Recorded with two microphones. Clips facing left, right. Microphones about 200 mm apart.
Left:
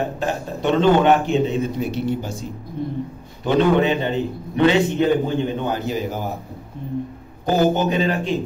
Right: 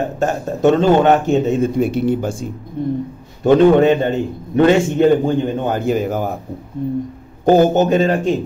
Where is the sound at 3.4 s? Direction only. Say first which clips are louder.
Right 7 dB; 45° right (ahead or behind).